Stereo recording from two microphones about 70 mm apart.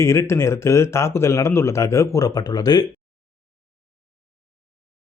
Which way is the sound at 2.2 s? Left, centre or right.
Left.